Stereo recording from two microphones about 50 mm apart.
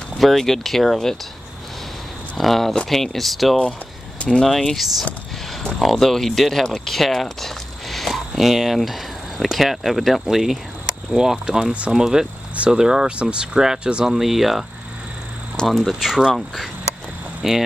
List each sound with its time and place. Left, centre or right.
0.2 s speech: centre
2.3 s speech: centre; by 11.9 s right
11.9 s speech: centre
15.5 s speech: centre
17.4 s speech: centre